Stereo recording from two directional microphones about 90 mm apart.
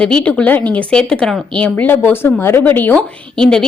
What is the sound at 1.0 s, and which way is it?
Speech, 5° left (ahead or behind).